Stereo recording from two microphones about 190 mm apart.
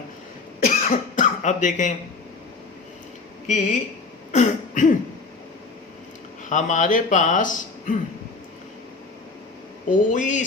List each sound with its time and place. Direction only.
0.6 s cough: 45° left (ahead or behind)
3.4 s speech: 40° left (ahead or behind)
4.3 s throat clearing: 40° left (ahead or behind)
6.5 s speech: 40° left (ahead or behind)
9.8 s speech: 40° left (ahead or behind)